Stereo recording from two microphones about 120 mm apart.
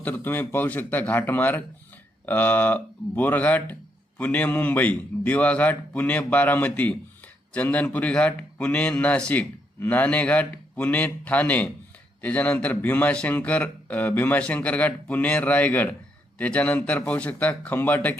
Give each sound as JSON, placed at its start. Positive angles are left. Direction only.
{"t": 0.0, "sound": "a man's voice", "side_deg": 15}